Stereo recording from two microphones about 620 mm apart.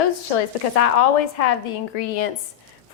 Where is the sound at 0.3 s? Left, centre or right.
Left.